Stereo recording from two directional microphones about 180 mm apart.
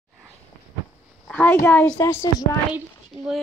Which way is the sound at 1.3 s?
10° left (ahead or behind).